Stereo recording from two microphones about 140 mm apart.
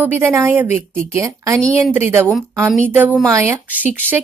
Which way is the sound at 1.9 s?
15° right (ahead or behind).